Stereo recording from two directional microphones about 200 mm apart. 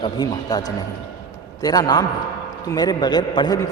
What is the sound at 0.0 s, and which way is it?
A man's voice, 20° left (ahead or behind).